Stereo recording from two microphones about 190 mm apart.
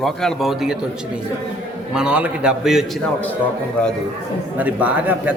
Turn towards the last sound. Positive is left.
turn(degrees=-10)  # may be behind; listen again after turning